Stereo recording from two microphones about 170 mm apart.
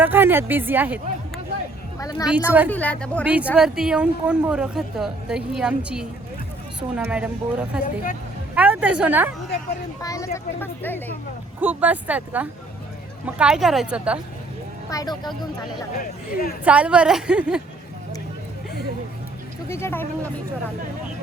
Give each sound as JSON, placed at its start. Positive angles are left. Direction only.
{"t": 0.0, "sound": "speech", "side_deg": -10}
{"t": 2.0, "sound": "speech", "side_deg": 20}
{"t": 2.3, "sound": "speech", "side_deg": -10}
{"t": 2.6, "sound": "speech", "side_deg": 10}
{"t": 3.2, "sound": "speech", "side_deg": -10}
{"t": 10.0, "sound": "speech", "side_deg": 20}
{"t": 11.6, "sound": "speech", "side_deg": -10}
{"t": 14.8, "sound": "speech", "side_deg": 20}
{"t": 15.9, "sound": "speech", "side_deg": 60}
{"t": 16.6, "sound": "speech", "side_deg": -5}
{"t": 19.6, "sound": "speech", "side_deg": 15}